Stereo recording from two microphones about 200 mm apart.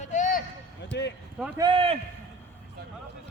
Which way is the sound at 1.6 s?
25° right (ahead or behind).